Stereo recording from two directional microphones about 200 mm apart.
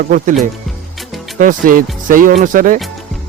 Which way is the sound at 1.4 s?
45° right (ahead or behind).